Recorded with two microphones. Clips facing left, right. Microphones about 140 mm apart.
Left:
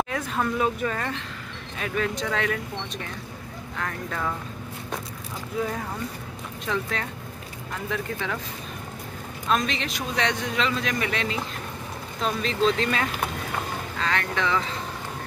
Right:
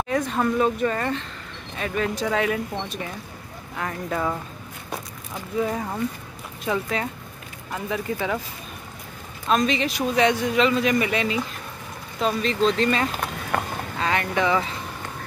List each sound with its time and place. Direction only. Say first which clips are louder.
0.1 s a man's voice: right 4 dB; centre (ahead or behind)
5.6 s speech: right 4 dB; 10° right (ahead or behind)
9.5 s a man's voice: right 4 dB; centre (ahead or behind)
13.5 s speech: right 7 dB; 60° right (ahead or behind)
14.0 s speech: right 4 dB; 15° right (ahead or behind)